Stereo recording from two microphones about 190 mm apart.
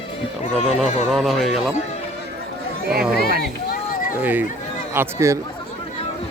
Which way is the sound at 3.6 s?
45° left (ahead or behind).